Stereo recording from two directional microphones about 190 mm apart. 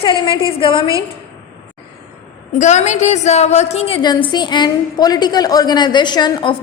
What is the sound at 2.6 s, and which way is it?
A woman's voice, 40° left (ahead or behind).